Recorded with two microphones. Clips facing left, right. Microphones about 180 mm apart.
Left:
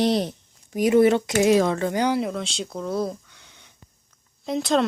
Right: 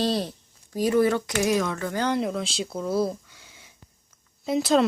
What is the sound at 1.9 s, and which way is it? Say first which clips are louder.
Speech: left 3 dB; 15° left (ahead or behind).